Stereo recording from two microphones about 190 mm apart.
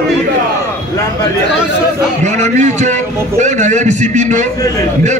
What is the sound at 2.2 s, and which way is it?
A man's voice, 40° right (ahead or behind).